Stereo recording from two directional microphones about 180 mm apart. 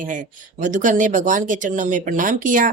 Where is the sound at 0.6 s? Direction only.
45° right (ahead or behind).